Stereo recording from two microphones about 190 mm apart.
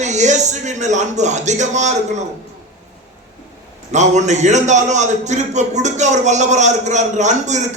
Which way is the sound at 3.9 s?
40° right (ahead or behind).